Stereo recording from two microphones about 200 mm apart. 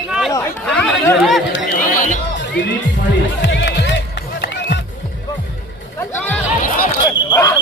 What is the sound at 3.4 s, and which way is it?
Music, 60° left (ahead or behind).